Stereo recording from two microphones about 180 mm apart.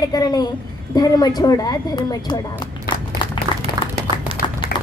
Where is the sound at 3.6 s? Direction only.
35° right (ahead or behind).